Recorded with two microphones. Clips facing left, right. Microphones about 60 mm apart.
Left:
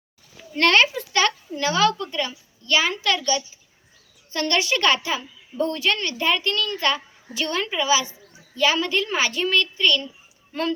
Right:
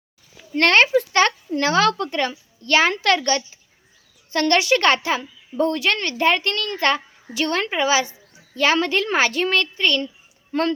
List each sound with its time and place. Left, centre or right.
0.5 s speech: right
1.5 s speech: right
10.5 s speech: right